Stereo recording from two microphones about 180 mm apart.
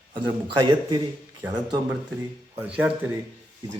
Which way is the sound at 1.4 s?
10° right (ahead or behind).